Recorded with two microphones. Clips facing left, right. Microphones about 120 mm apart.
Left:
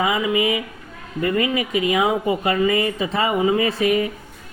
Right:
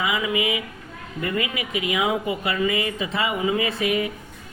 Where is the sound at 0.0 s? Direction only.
35° left (ahead or behind).